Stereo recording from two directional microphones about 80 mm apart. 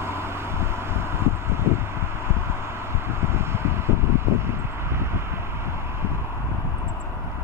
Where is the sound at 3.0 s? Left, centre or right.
Right.